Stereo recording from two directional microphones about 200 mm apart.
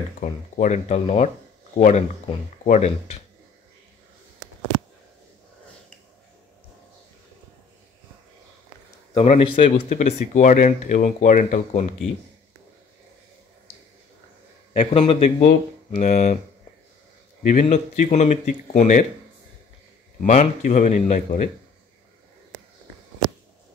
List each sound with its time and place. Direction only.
0.2 s speech: 40° left (ahead or behind)
9.1 s speech: 30° left (ahead or behind)
14.8 s speech: 30° left (ahead or behind)
17.5 s speech: 40° left (ahead or behind)
20.2 s speech: 35° left (ahead or behind)